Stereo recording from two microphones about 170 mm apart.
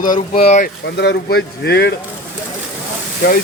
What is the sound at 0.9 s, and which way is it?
Speech, 80° left.